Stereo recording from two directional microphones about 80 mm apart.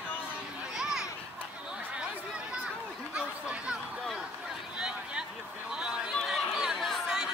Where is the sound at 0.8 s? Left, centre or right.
Centre.